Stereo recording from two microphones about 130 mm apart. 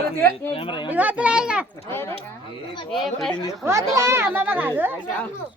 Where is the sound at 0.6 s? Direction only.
40° left (ahead or behind).